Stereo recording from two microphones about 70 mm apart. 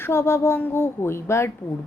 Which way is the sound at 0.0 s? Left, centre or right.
Left.